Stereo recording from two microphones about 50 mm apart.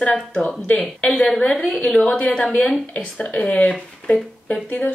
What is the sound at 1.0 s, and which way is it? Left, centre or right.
Speech, centre.